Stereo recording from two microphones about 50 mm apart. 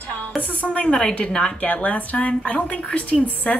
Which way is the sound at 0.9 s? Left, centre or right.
Centre.